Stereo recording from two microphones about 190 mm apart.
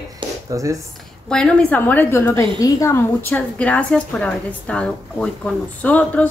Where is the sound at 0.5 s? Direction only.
15° right (ahead or behind).